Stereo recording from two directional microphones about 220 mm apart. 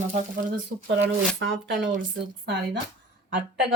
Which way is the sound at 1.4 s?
50° right (ahead or behind).